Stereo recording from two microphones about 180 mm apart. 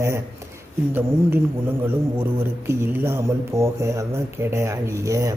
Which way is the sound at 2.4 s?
15° right (ahead or behind).